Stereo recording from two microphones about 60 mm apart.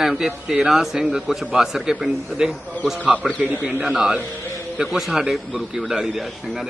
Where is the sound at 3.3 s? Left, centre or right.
Right.